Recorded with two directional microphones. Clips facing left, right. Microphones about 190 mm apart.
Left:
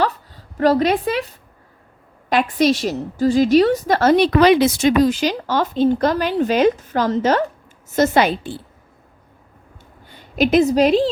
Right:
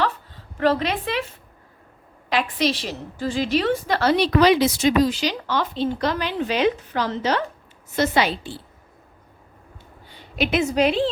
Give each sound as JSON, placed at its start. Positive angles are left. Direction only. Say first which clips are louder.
{"t": 0.0, "sound": "a sound", "louder": "left 4 dB", "side_deg": 40}
{"t": 2.3, "sound": "a woman's voice", "louder": "left 6 dB", "side_deg": 45}
{"t": 10.1, "sound": "a woman's voice", "louder": "left 7 dB", "side_deg": 45}